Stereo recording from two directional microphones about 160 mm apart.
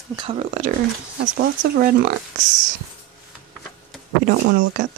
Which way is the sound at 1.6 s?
65° right (ahead or behind).